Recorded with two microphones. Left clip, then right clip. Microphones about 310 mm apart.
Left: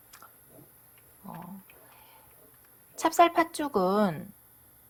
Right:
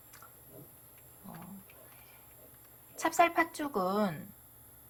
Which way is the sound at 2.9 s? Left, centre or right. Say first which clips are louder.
Left 5 dB; left.